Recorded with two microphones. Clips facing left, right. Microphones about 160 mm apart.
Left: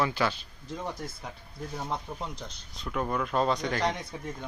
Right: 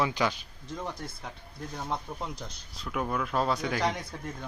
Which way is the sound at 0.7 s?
5° left (ahead or behind).